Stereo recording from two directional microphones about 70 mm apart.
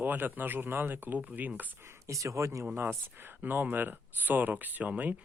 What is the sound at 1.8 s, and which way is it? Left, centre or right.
Speech, right.